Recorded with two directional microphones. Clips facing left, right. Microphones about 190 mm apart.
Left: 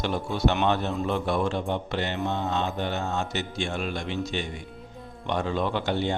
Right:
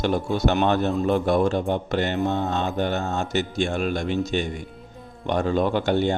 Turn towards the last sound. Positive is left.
turn(degrees=-45)  # may be behind; listen again after turning